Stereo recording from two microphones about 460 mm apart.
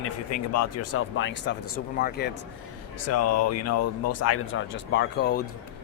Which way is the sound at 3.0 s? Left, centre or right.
Left.